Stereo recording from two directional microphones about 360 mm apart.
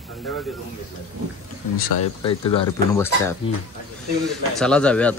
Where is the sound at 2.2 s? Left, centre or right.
Centre.